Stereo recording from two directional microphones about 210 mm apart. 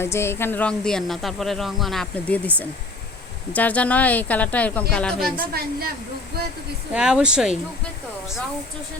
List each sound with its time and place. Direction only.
0.0 s speech: 10° left (ahead or behind)
3.5 s a woman's voice: 5° left (ahead or behind)
5.5 s a woman's voice: 45° right (ahead or behind)
6.9 s speech: 5° right (ahead or behind)